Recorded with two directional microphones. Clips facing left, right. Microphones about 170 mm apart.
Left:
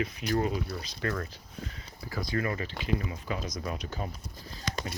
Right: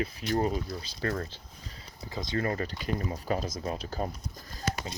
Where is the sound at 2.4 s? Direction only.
40° right (ahead or behind).